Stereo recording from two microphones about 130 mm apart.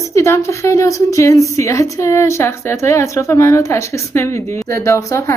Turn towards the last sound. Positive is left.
turn(degrees=20)  # may be behind; listen again after turning